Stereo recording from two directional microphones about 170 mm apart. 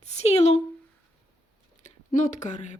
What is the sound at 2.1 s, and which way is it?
Speech, 50° left (ahead or behind).